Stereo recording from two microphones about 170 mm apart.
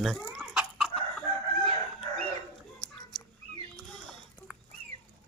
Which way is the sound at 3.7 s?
Centre (ahead or behind).